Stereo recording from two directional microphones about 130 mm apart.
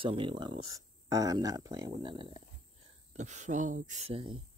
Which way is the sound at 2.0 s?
40° right (ahead or behind).